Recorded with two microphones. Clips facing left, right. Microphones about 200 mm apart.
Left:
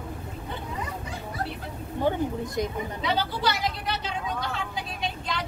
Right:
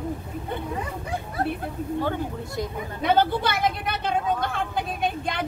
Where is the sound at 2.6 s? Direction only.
15° left (ahead or behind).